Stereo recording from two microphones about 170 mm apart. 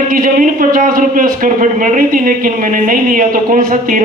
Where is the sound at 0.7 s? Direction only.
55° right (ahead or behind).